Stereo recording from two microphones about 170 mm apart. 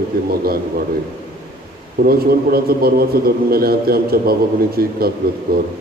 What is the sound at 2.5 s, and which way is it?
A man's voice, 65° right (ahead or behind).